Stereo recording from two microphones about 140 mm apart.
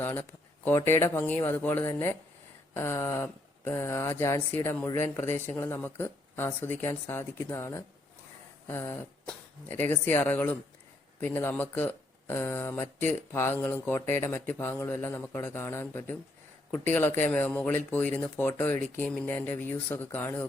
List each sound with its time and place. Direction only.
0.0 s speech: 15° left (ahead or behind)